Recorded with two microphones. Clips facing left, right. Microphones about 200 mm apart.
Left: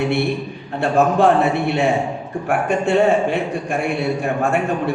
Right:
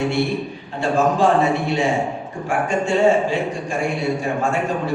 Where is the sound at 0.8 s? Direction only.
60° left (ahead or behind).